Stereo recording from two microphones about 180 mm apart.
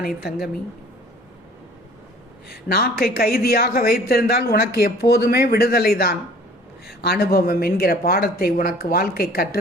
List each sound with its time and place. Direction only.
2.5 s a woman's voice: 60° left (ahead or behind)